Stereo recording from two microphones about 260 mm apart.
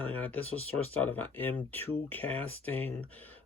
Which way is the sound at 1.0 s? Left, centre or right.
Centre.